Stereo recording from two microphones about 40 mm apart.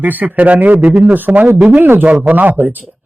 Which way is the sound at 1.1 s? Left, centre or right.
Right.